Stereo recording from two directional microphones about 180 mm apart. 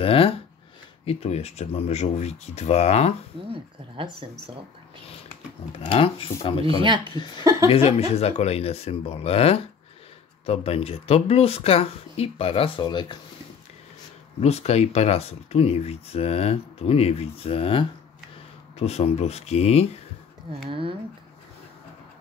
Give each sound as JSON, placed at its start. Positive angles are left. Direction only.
{"t": 0.0, "sound": "speech", "side_deg": 30}
{"t": 3.5, "sound": "a woman's voice", "side_deg": -30}
{"t": 5.8, "sound": "speech", "side_deg": 30}
{"t": 6.8, "sound": "a woman's voice", "side_deg": -25}
{"t": 7.7, "sound": "speech", "side_deg": 35}
{"t": 14.4, "sound": "speech", "side_deg": 35}
{"t": 20.6, "sound": "speech", "side_deg": -30}